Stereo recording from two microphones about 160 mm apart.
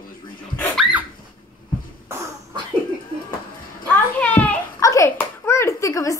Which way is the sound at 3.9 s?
10° left (ahead or behind).